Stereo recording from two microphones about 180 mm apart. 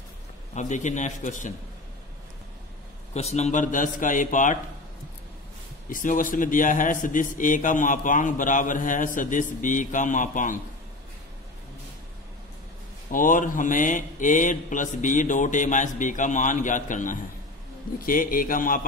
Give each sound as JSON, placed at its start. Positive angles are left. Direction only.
{"t": 0.6, "sound": "a man's voice", "side_deg": 40}
{"t": 3.2, "sound": "a man's voice", "side_deg": 35}
{"t": 5.9, "sound": "a man's voice", "side_deg": 50}
{"t": 13.1, "sound": "a man's voice", "side_deg": 45}